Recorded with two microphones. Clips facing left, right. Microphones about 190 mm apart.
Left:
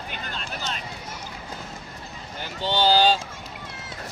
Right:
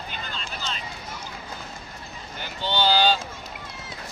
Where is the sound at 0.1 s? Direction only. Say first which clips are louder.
Left 1 dB; 55° left (ahead or behind).